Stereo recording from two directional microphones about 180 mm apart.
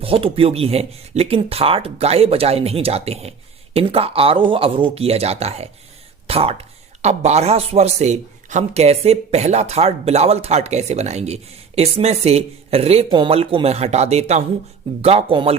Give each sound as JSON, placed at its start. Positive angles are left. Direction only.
{"t": 0.0, "sound": "speech", "side_deg": -30}